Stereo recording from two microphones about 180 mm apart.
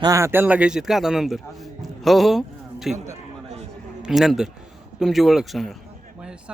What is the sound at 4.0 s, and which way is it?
A man's voice, centre (ahead or behind).